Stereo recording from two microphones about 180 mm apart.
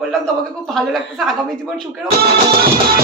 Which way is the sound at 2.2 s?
55° right (ahead or behind).